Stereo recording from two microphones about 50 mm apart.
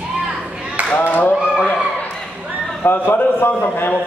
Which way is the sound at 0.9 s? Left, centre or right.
Left.